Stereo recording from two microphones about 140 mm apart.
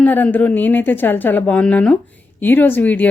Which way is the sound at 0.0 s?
10° left (ahead or behind).